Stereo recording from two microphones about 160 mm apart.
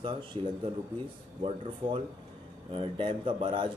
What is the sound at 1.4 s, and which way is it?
A man's voice, 35° right (ahead or behind).